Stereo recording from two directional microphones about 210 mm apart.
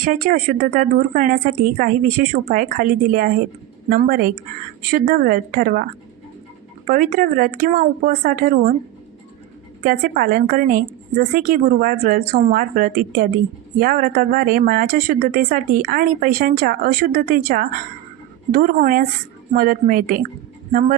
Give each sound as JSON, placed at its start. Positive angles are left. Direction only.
{"t": 0.0, "sound": "a woman's voice", "side_deg": -40}
{"t": 6.8, "sound": "speech", "side_deg": -45}
{"t": 9.8, "sound": "speech", "side_deg": -45}